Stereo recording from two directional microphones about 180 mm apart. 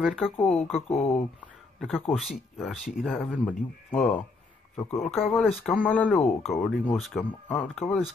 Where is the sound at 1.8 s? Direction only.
5° left (ahead or behind).